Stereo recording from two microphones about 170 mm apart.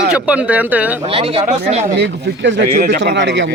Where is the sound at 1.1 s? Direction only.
35° right (ahead or behind).